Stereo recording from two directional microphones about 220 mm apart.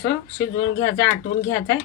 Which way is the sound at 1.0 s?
15° left (ahead or behind).